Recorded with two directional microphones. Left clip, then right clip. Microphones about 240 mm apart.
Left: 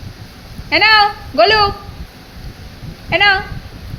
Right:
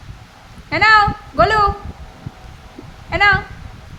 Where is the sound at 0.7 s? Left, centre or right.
Centre.